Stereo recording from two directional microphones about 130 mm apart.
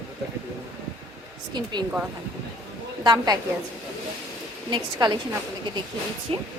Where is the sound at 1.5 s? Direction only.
35° right (ahead or behind).